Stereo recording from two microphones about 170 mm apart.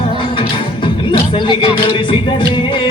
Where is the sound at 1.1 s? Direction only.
25° left (ahead or behind).